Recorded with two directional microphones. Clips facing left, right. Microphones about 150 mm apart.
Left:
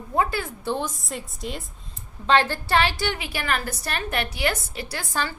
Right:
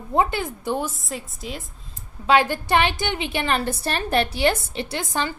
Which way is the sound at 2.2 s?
10° right (ahead or behind).